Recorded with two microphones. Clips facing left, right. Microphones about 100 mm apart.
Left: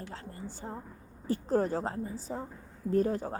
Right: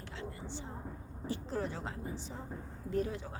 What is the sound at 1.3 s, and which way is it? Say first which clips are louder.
A woman's voice: left 9 dB; 45° left (ahead or behind).